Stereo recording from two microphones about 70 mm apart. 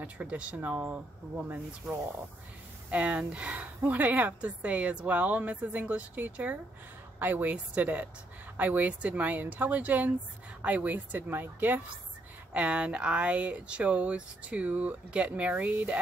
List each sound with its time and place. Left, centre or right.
0.0 s a woman's voice: centre
12.5 s a woman's voice: centre